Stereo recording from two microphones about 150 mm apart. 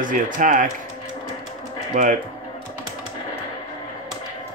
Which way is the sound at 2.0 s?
55° right (ahead or behind).